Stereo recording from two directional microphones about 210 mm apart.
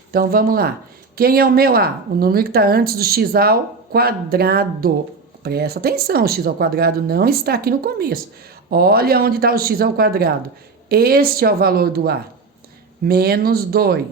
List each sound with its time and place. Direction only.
0.1 s a woman's voice: 45° right (ahead or behind)